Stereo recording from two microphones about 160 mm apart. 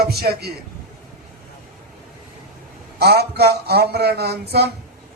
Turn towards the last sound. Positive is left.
turn(degrees=-90)